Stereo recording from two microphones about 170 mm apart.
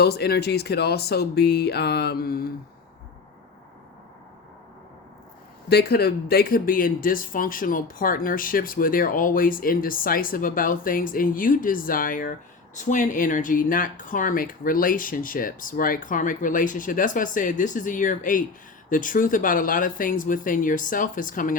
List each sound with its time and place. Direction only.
0.0 s speech: 70° left (ahead or behind)
5.6 s speech: 70° left (ahead or behind); by 21.5 s 55° left (ahead or behind)